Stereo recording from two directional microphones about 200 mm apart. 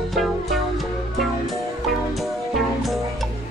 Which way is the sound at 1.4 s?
Centre (ahead or behind).